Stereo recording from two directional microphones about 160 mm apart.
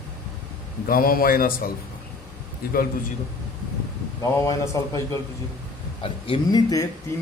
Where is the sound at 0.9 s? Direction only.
70° left (ahead or behind).